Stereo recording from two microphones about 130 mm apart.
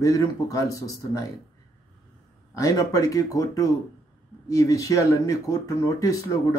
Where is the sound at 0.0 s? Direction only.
25° left (ahead or behind).